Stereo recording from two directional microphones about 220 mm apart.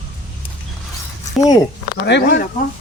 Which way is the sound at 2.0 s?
50° left (ahead or behind).